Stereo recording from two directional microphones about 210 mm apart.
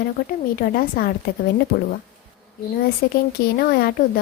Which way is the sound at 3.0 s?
45° left (ahead or behind).